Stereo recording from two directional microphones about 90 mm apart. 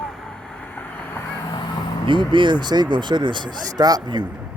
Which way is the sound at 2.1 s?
65° right (ahead or behind).